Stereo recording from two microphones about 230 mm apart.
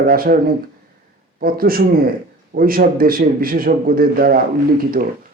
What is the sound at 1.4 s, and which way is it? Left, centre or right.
Speech, right.